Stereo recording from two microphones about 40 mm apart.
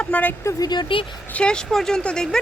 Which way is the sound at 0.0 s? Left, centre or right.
Left.